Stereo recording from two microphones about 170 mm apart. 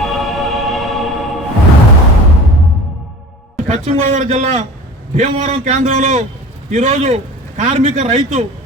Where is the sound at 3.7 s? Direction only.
40° right (ahead or behind).